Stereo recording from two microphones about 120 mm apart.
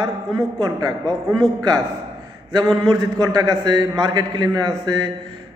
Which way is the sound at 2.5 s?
35° right (ahead or behind).